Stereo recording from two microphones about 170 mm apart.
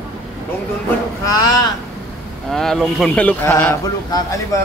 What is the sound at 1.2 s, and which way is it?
Speech, 20° left (ahead or behind).